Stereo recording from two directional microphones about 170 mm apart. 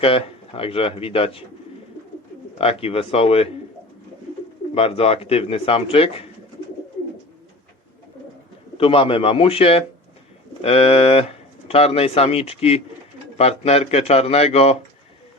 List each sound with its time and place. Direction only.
0.0 s speech: 35° left (ahead or behind)
2.6 s speech: 35° left (ahead or behind)
4.7 s speech: 35° left (ahead or behind)
8.8 s speech: 35° left (ahead or behind)